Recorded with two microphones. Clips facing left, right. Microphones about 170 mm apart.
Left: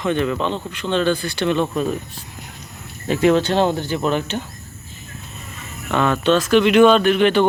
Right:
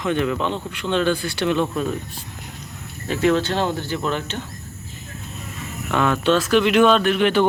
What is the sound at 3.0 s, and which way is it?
Speech, 20° left (ahead or behind).